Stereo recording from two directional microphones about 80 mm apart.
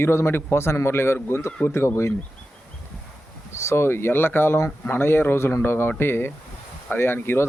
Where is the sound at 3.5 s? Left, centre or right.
Left.